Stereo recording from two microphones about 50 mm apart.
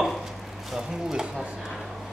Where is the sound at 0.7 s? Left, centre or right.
Centre.